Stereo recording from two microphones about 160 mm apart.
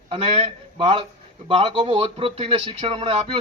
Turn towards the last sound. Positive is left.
turn(degrees=-35)  # may be behind; listen again after turning